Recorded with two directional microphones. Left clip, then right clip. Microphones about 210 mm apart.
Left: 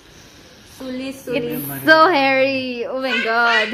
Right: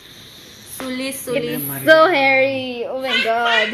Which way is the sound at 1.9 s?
15° left (ahead or behind).